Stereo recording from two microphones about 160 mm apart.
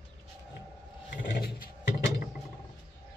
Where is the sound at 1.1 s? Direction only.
65° left (ahead or behind).